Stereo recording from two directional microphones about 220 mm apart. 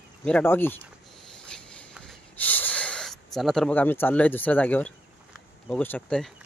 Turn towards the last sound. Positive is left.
turn(degrees=5)  # may be behind; listen again after turning